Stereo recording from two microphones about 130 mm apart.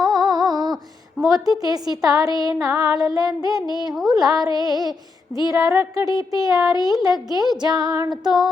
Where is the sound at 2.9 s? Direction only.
30° right (ahead or behind).